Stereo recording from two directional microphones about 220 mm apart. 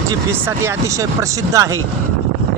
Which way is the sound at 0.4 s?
10° right (ahead or behind).